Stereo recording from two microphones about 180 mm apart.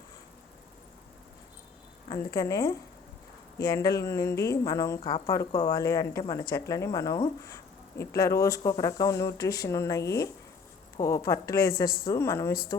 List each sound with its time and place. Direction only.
2.1 s speech: 20° left (ahead or behind)